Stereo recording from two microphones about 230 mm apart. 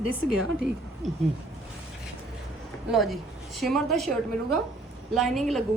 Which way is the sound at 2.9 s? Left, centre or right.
Centre.